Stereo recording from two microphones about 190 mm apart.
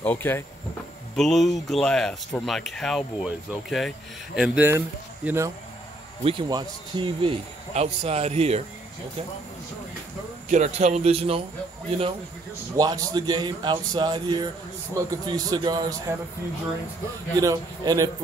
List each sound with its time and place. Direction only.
0.0 s speech: 10° left (ahead or behind)
4.4 s speech: 10° right (ahead or behind)
6.2 s speech: 25° right (ahead or behind)
10.5 s speech: 35° right (ahead or behind)
12.7 s speech: 20° right (ahead or behind)
17.4 s speech: 20° right (ahead or behind)